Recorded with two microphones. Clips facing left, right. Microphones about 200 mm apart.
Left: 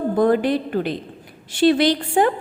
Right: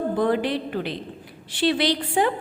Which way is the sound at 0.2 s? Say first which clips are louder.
Left 7 dB; 45° left (ahead or behind).